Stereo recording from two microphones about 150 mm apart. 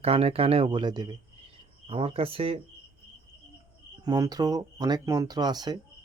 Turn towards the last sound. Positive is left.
turn(degrees=-25)  # may be behind; listen again after turning